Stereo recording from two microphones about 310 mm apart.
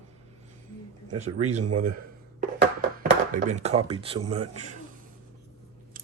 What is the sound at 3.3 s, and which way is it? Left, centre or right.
Speech, right.